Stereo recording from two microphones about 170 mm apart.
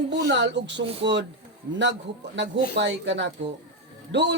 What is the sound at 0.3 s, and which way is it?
Speech, 90° right.